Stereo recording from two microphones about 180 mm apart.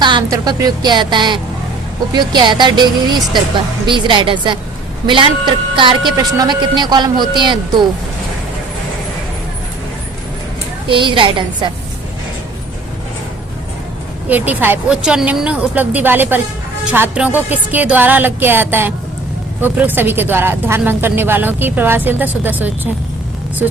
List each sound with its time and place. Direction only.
0.0 s a woman's voice: 25° right (ahead or behind)
10.8 s a woman's voice: 30° right (ahead or behind)
14.3 s a woman's voice: 10° right (ahead or behind)